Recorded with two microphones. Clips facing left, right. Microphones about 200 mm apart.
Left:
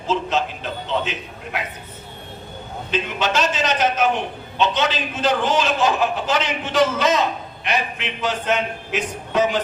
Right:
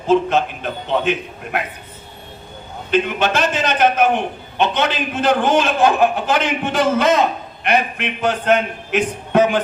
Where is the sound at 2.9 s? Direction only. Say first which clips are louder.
Right 5 dB; 55° right (ahead or behind).